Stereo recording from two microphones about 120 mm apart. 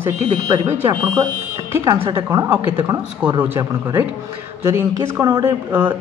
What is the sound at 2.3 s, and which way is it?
Speech, 30° right (ahead or behind).